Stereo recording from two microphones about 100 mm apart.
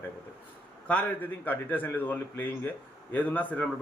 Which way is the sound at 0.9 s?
15° left (ahead or behind).